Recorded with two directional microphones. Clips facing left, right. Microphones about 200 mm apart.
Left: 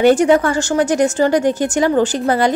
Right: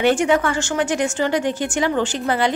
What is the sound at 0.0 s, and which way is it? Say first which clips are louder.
Speech: left 6 dB; 40° left (ahead or behind).